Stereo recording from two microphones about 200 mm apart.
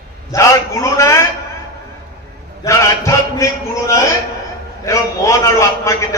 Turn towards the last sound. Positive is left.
turn(degrees=15)  # may be behind; listen again after turning